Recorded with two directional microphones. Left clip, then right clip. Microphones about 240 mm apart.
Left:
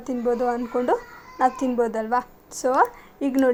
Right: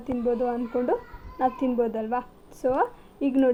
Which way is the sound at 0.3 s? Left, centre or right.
Left.